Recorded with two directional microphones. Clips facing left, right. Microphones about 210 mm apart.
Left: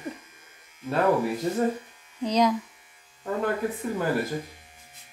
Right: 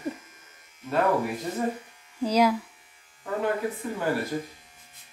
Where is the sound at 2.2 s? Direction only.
5° right (ahead or behind).